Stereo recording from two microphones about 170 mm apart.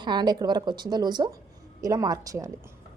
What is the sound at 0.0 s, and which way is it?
A woman's voice, 25° right (ahead or behind).